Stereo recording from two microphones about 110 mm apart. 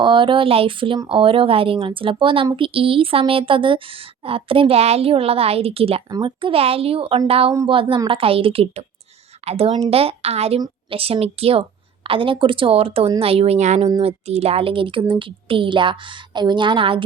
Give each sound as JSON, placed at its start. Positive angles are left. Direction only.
{"t": 0.0, "sound": "a woman's voice", "side_deg": -50}
{"t": 6.1, "sound": "a woman's voice", "side_deg": -45}
{"t": 14.0, "sound": "a woman's voice", "side_deg": -65}